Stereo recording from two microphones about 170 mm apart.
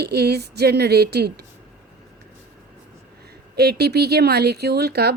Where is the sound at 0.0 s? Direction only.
70° right (ahead or behind).